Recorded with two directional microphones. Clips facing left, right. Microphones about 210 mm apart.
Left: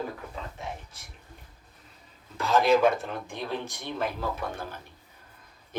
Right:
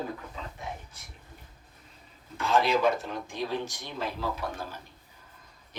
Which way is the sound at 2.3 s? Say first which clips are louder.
Left 3 dB; 45° left (ahead or behind).